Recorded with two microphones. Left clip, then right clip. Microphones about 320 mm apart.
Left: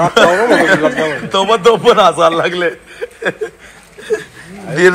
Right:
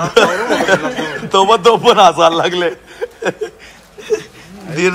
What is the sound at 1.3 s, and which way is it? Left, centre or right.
A man's voice, centre.